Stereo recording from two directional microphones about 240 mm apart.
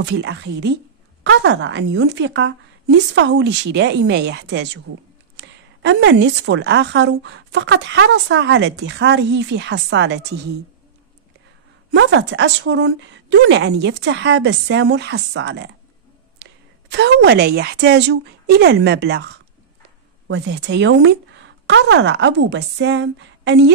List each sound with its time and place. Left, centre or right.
0.0 s a woman's voice: right
11.9 s a woman's voice: right
16.9 s a woman's voice: right